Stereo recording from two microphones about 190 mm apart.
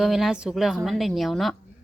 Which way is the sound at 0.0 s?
Centre (ahead or behind).